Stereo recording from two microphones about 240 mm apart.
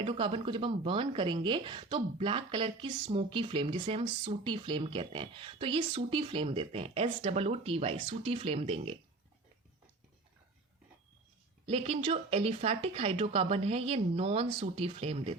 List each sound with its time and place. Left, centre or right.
0.0 s speech: right
11.6 s speech: right